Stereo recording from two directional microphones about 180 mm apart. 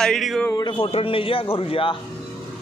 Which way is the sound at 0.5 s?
25° left (ahead or behind).